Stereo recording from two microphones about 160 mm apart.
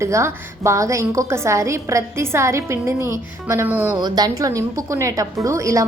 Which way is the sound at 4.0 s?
25° right (ahead or behind).